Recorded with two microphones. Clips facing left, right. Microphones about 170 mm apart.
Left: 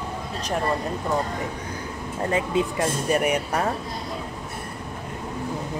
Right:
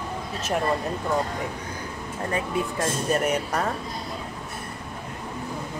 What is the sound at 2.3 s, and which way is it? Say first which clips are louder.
Speech: left 3 dB; 20° left (ahead or behind).